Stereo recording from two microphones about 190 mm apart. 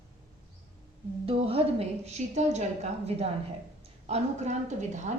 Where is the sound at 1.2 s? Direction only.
30° right (ahead or behind).